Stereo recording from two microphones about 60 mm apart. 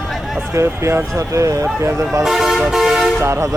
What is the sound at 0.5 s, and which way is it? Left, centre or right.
Speech, right.